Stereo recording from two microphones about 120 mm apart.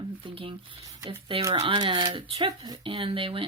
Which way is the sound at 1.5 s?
45° right (ahead or behind).